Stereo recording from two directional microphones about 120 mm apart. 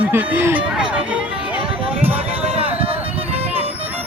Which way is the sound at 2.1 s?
55° right (ahead or behind).